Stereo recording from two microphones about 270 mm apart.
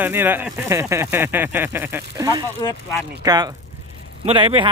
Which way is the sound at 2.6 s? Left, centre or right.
Centre.